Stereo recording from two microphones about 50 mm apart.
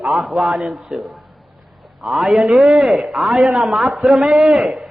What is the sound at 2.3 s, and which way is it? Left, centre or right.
Speech, centre.